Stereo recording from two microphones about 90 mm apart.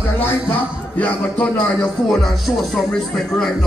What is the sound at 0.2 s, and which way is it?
Speech, 20° left (ahead or behind).